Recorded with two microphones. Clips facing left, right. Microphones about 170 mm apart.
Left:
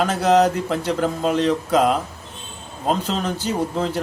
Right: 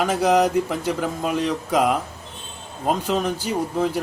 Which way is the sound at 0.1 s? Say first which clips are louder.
Even; 10° right (ahead or behind).